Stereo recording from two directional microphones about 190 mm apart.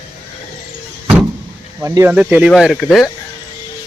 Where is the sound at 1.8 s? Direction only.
15° right (ahead or behind); by 3.1 s centre (ahead or behind).